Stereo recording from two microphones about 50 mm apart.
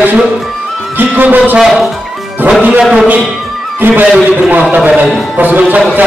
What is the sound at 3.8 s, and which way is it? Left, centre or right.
Speech, right.